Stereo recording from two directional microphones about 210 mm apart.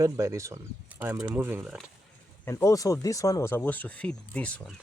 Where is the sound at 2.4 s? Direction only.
15° left (ahead or behind).